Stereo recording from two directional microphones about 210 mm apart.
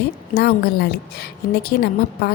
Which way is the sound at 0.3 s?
50° left (ahead or behind).